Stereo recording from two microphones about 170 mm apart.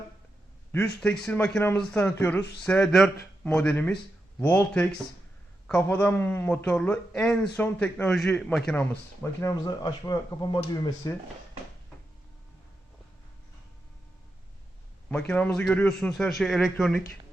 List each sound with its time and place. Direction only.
1.0 s a man's voice: 5° left (ahead or behind)
9.4 s speech: 20° left (ahead or behind)
15.3 s a man's voice: 5° left (ahead or behind)